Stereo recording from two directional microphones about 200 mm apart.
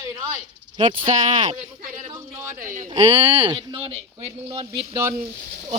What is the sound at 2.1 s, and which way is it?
Speech, 15° right (ahead or behind).